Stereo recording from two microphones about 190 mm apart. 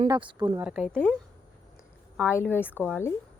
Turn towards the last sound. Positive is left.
turn(degrees=10)  # may be behind; listen again after turning